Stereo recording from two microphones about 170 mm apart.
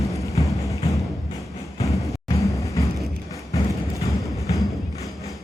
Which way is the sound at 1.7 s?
20° left (ahead or behind).